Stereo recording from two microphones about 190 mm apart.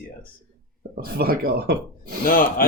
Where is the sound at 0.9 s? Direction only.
50° right (ahead or behind).